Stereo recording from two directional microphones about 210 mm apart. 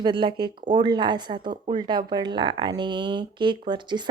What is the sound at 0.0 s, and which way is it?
Speech, 20° right (ahead or behind).